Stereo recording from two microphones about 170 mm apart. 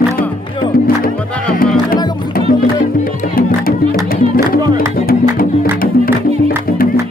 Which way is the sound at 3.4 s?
55° left (ahead or behind).